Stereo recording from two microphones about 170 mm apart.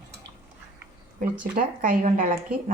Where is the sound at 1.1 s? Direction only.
55° right (ahead or behind).